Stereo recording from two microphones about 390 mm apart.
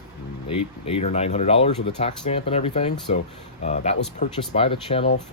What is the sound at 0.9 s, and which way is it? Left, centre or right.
Speech, centre.